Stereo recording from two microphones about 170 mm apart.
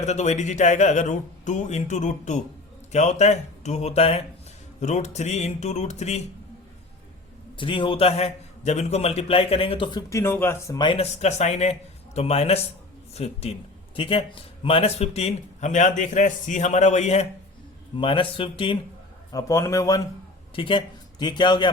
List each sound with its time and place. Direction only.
0.0 s a man's voice: 40° left (ahead or behind)
7.5 s a man's voice: 30° left (ahead or behind); by 10.8 s 15° left (ahead or behind)
10.8 s a man's voice: 30° left (ahead or behind)
17.9 s a man's voice: 30° left (ahead or behind)
19.3 s a man's voice: 20° left (ahead or behind)
20.6 s a man's voice: 30° left (ahead or behind)